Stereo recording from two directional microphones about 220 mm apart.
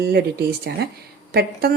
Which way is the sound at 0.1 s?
45° right (ahead or behind).